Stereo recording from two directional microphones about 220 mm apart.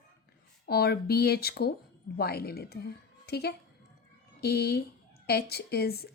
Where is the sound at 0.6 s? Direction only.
45° left (ahead or behind).